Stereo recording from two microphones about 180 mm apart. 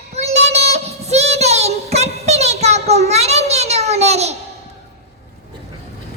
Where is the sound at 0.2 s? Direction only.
35° right (ahead or behind).